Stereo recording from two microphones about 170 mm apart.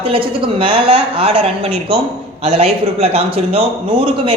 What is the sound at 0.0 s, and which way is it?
A woman's voice, 30° right (ahead or behind).